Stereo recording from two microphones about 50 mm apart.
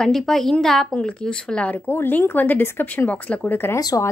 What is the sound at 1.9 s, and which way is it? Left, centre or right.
Speech, left.